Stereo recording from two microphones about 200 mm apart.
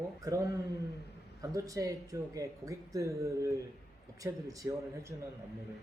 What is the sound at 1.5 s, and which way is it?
Speech, 15° right (ahead or behind).